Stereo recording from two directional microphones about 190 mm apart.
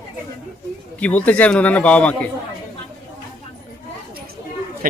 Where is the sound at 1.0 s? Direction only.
5° left (ahead or behind).